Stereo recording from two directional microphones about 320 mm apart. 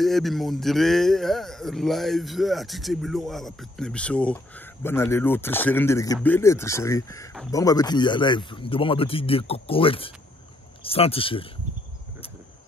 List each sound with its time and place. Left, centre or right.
0.0 s speech: centre